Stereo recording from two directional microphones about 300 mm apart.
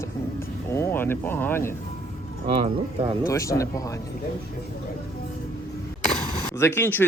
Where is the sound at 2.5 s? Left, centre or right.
Centre.